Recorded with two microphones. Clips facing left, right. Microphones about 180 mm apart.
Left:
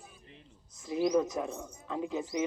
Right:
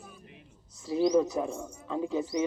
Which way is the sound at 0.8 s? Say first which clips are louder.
Right 3 dB; 35° right (ahead or behind).